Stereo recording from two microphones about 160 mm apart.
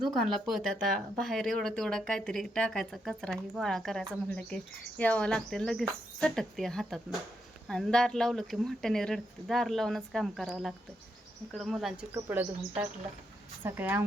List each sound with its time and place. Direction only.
0.0 s speech: centre (ahead or behind)
12.1 s speech: 15° right (ahead or behind)